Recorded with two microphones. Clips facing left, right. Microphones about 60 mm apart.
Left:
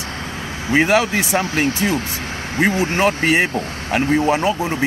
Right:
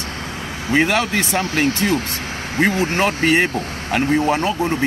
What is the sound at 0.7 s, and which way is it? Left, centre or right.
Speech, centre.